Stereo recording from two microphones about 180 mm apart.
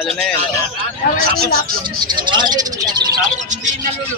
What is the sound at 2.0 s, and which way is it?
Bird, 25° right (ahead or behind).